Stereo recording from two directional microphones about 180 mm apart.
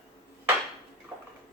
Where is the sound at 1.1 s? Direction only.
20° right (ahead or behind).